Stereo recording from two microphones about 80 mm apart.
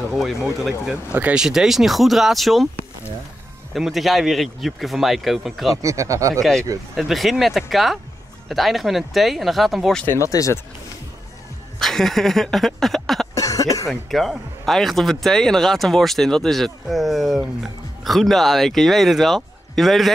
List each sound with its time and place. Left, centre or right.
0.1 s speech: centre
3.7 s speech: centre
5.8 s speech: right
7.0 s speech: centre
10.1 s speech: left
11.8 s a sound: centre
13.3 s a sound: left
13.8 s speech: centre